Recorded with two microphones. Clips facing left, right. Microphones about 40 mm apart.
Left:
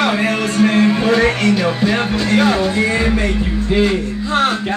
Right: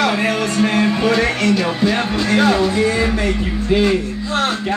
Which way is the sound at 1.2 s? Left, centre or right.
Left.